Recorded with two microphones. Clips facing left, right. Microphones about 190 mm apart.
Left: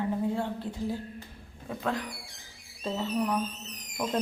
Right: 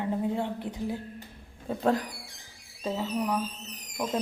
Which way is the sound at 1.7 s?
30° right (ahead or behind).